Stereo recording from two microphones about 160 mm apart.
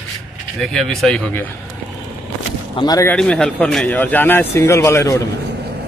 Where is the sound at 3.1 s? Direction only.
5° left (ahead or behind).